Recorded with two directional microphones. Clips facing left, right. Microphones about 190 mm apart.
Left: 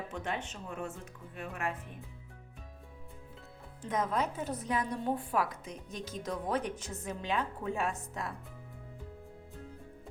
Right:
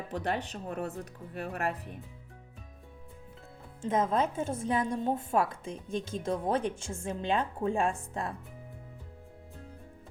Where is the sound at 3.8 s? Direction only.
25° right (ahead or behind).